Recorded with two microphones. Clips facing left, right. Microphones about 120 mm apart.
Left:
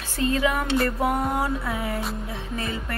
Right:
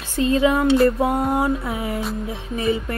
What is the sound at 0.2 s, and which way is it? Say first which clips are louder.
Music: right 6 dB; 25° right (ahead or behind).